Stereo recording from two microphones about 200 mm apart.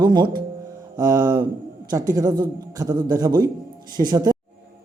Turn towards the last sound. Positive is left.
turn(degrees=-20)  # may be behind; listen again after turning